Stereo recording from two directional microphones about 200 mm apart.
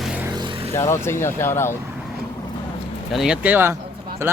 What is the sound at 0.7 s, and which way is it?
Speech, 15° left (ahead or behind).